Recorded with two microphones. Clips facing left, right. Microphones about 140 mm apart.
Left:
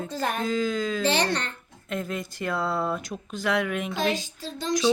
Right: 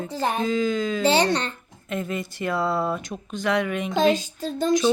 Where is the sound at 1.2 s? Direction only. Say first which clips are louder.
Right 4 dB; 30° right (ahead or behind).